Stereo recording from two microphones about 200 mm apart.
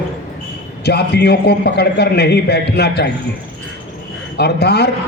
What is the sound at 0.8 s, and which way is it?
A man's voice, 55° left (ahead or behind).